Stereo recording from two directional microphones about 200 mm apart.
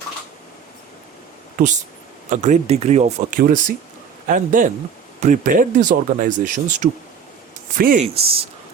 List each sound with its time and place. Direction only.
1.5 s speech: 40° right (ahead or behind)
8.1 s speech: 30° right (ahead or behind)